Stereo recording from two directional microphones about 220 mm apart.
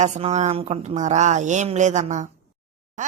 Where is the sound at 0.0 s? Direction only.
30° right (ahead or behind).